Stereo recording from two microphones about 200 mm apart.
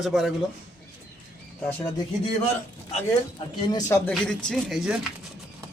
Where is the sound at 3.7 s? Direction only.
15° left (ahead or behind).